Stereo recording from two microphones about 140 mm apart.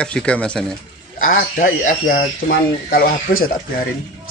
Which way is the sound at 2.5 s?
90° left.